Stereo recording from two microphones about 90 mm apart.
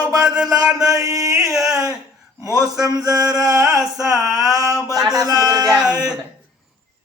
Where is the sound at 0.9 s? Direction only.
35° right (ahead or behind).